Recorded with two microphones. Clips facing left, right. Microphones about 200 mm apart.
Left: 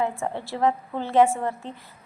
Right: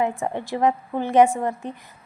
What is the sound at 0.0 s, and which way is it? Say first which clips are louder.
A woman's voice: right 3 dB; 15° right (ahead or behind).